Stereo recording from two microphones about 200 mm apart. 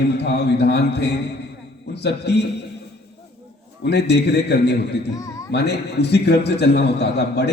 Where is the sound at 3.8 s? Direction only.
55° left (ahead or behind).